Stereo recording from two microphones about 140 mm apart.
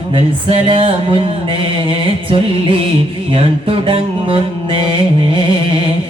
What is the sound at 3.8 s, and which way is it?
Music, 40° right (ahead or behind).